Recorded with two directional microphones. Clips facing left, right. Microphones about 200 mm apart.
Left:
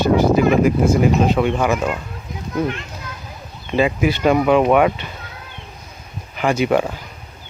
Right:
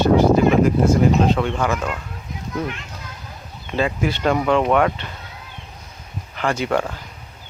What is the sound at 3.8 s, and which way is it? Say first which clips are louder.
Speech: left 4 dB; 10° left (ahead or behind).